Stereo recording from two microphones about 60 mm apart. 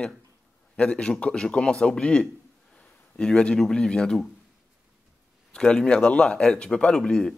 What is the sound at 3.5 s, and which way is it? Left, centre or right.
Speech, centre.